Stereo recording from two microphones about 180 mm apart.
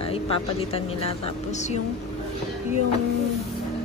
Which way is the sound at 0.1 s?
30° left (ahead or behind).